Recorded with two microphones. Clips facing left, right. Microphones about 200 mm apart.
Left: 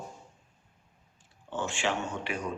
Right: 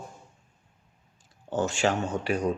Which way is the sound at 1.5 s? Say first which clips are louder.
Right 6 dB; 40° right (ahead or behind).